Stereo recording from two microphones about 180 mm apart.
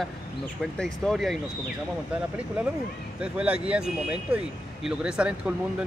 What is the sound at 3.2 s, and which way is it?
Speech, 5° right (ahead or behind).